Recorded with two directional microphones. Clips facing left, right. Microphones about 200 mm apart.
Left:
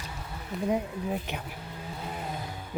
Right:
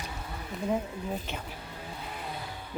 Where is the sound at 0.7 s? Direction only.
10° left (ahead or behind).